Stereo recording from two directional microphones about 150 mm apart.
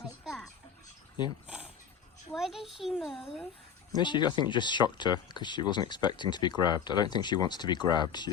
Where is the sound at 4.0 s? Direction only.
30° left (ahead or behind).